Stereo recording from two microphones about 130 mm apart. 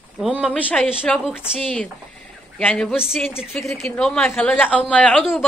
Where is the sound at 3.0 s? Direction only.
5° right (ahead or behind).